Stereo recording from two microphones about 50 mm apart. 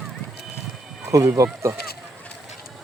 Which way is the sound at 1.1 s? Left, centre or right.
Right.